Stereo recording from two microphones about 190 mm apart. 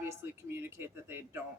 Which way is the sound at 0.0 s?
15° right (ahead or behind).